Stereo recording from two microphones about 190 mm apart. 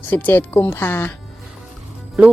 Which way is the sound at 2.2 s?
5° right (ahead or behind).